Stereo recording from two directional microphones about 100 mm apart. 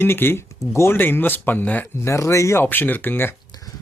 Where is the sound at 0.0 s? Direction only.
20° left (ahead or behind).